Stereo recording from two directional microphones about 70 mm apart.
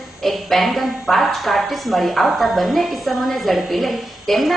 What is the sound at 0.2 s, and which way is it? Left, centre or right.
Speech, centre.